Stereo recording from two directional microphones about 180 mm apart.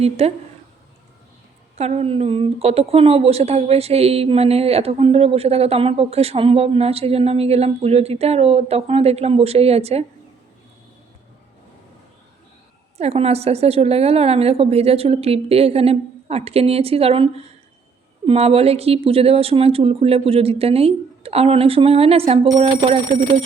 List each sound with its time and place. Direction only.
0.0 s a woman's voice: 35° right (ahead or behind)
1.8 s a woman's voice: 35° right (ahead or behind)
13.0 s a woman's voice: 35° right (ahead or behind)